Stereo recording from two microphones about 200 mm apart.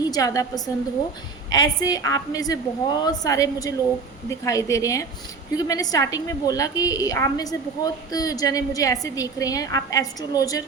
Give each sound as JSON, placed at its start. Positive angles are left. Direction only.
{"t": 0.1, "sound": "a woman's voice", "side_deg": 15}